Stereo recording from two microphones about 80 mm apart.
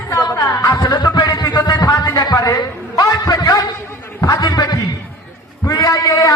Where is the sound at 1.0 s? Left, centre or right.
Left.